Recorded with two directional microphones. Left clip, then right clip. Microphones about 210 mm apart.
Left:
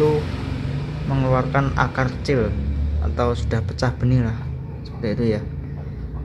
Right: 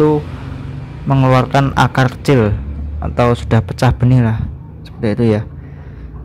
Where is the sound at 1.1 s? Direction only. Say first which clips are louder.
Right 8 dB; 30° right (ahead or behind).